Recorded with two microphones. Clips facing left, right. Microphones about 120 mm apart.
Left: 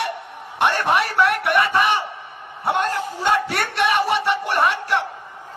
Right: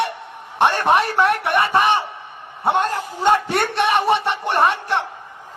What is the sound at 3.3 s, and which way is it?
Music, 25° right (ahead or behind).